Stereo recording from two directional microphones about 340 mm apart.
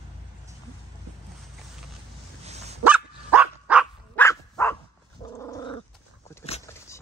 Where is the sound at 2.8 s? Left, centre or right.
Centre.